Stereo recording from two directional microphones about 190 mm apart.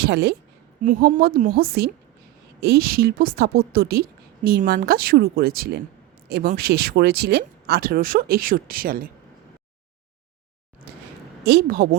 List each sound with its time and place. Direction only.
0.0 s a woman's voice: 60° right (ahead or behind)
0.8 s a woman's voice: 40° right (ahead or behind)
11.4 s speech: 55° right (ahead or behind)